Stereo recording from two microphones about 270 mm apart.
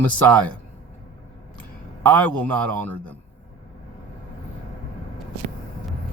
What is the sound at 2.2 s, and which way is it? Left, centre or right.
Speech, centre.